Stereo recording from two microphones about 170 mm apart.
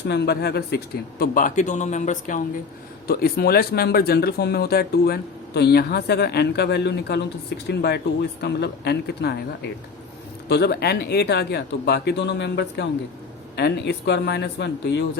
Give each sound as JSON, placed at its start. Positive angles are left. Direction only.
{"t": 0.1, "sound": "speech", "side_deg": 70}
{"t": 1.2, "sound": "a man's voice", "side_deg": 55}
{"t": 3.1, "sound": "speech", "side_deg": 60}
{"t": 10.5, "sound": "speech", "side_deg": 70}
{"t": 13.6, "sound": "speech", "side_deg": 80}